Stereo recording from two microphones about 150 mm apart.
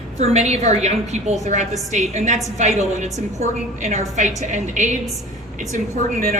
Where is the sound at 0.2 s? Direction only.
45° right (ahead or behind).